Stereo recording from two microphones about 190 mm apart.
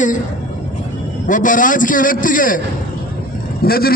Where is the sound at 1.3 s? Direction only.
45° left (ahead or behind).